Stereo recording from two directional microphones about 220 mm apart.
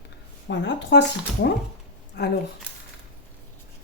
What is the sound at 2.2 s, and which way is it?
Speech, 45° left (ahead or behind).